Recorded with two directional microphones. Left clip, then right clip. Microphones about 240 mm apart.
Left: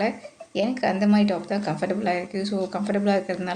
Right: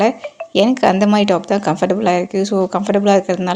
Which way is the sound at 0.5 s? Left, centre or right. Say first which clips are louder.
Right 11 dB; right.